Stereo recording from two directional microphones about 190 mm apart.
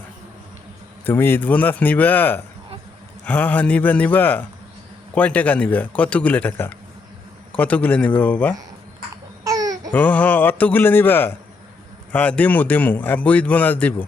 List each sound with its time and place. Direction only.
1.0 s a man's voice: 10° left (ahead or behind)
9.4 s babbling: 20° right (ahead or behind)
9.9 s a man's voice: 5° left (ahead or behind)